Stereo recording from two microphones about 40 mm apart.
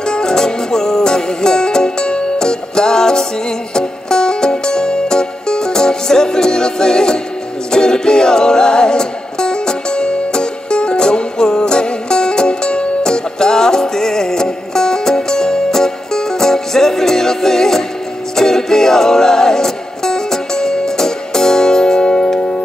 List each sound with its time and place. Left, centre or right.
0.0 s music: centre